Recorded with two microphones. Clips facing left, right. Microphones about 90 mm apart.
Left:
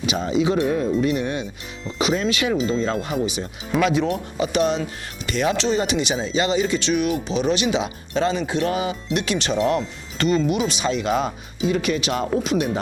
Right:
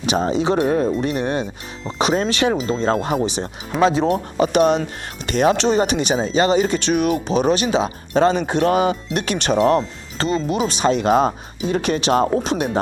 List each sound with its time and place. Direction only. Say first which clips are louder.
0.0 s speech: right 2 dB; 40° right (ahead or behind)